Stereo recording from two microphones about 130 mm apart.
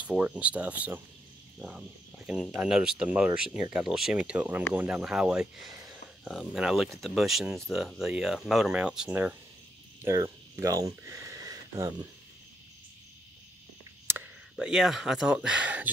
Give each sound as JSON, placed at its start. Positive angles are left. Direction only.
{"t": 0.0, "sound": "speech", "side_deg": -10}
{"t": 10.0, "sound": "speech", "side_deg": -20}
{"t": 14.0, "sound": "whispering", "side_deg": -15}
{"t": 14.5, "sound": "speech", "side_deg": -5}